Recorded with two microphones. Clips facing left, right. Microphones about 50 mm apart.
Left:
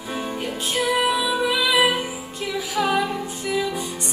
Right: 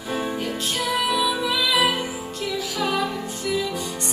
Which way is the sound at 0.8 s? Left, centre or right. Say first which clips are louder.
Left 3 dB; centre.